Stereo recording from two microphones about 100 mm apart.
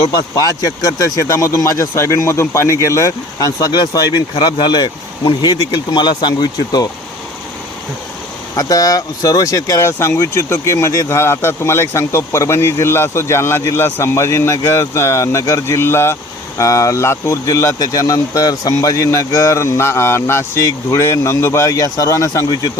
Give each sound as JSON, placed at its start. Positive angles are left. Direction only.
{"t": 0.2, "sound": "speech", "side_deg": 40}
{"t": 8.5, "sound": "speech", "side_deg": 35}